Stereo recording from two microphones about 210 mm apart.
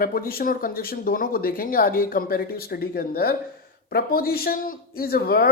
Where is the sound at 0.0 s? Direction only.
45° left (ahead or behind).